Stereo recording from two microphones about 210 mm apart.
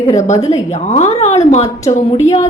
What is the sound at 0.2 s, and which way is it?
A woman's voice, 30° left (ahead or behind).